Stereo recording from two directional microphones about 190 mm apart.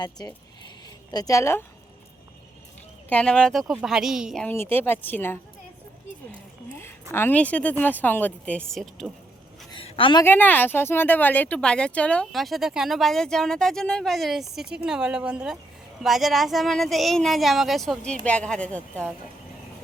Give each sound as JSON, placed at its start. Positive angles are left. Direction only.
{"t": 0.0, "sound": "a woman's voice", "side_deg": 20}
{"t": 3.1, "sound": "speech", "side_deg": 5}
{"t": 4.4, "sound": "speech", "side_deg": 10}
{"t": 6.3, "sound": "a sound", "side_deg": 10}
{"t": 7.1, "sound": "speech", "side_deg": 10}
{"t": 9.7, "sound": "a sound", "side_deg": 30}
{"t": 10.2, "sound": "speech", "side_deg": 10}